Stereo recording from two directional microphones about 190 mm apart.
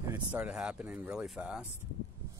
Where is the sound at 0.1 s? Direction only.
10° right (ahead or behind).